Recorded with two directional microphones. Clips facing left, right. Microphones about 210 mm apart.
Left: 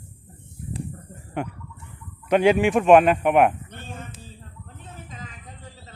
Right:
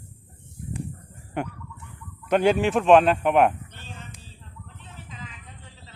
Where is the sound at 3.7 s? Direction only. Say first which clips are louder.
Left 5 dB; 50° left (ahead or behind).